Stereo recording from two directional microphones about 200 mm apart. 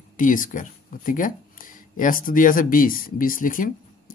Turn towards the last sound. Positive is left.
turn(degrees=45)  # may be behind; listen again after turning